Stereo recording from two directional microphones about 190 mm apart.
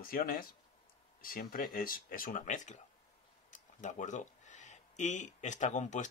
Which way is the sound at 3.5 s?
40° left (ahead or behind).